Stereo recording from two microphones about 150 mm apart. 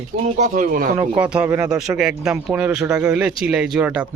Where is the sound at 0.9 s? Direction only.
10° right (ahead or behind).